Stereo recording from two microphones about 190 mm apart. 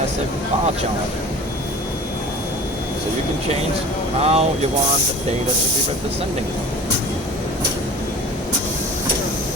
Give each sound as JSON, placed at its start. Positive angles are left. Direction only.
{"t": 4.2, "sound": "speech", "side_deg": -35}